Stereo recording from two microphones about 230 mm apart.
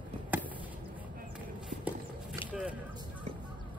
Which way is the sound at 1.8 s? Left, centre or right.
Centre.